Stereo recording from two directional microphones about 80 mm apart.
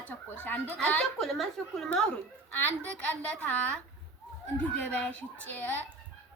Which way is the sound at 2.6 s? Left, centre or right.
Centre.